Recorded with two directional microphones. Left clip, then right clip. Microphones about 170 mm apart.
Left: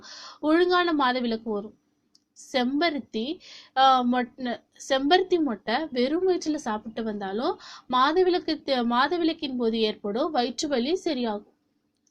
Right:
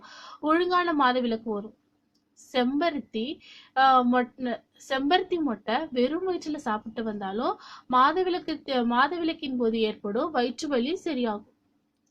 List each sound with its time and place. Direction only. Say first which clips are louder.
0.0 s a woman's voice: left 2 dB; centre (ahead or behind)